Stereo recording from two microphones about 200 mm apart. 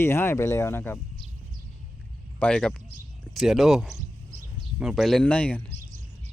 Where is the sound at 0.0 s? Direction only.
10° left (ahead or behind).